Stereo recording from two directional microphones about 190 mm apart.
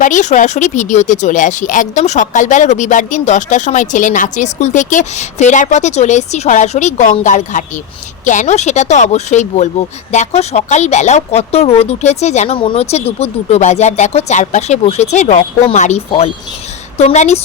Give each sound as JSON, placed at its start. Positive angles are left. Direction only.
{"t": 0.0, "sound": "speech", "side_deg": 40}